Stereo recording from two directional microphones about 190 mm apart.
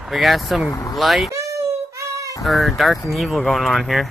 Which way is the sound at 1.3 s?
15° right (ahead or behind).